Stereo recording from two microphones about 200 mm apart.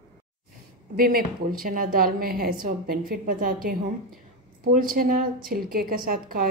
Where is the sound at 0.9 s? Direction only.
45° right (ahead or behind).